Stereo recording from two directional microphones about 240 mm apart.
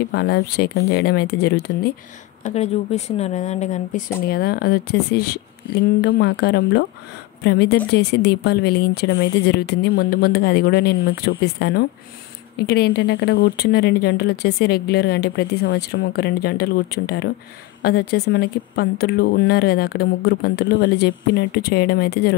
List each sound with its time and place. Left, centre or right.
0.1 s speech: left
2.4 s speech: left
4.3 s a woman's voice: left